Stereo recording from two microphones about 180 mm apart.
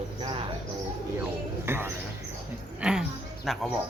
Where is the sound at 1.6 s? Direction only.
15° right (ahead or behind).